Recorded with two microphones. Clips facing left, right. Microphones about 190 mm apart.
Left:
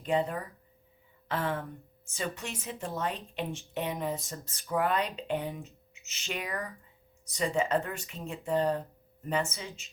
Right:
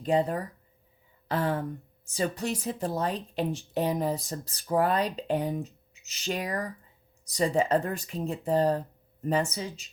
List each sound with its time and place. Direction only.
0.0 s a woman's voice: 35° right (ahead or behind)